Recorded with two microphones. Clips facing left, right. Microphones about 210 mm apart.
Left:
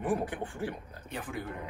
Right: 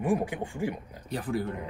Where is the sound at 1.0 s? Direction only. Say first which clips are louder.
Right 8 dB; 35° right (ahead or behind).